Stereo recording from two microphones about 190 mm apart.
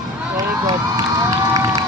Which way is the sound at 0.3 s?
20° right (ahead or behind).